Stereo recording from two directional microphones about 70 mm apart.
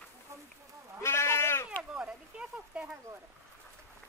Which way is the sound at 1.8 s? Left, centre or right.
Centre.